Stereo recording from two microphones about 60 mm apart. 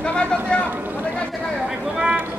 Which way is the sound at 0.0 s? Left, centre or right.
Centre.